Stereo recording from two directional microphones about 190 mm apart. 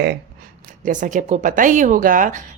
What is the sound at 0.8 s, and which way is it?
A woman's voice, 40° right (ahead or behind).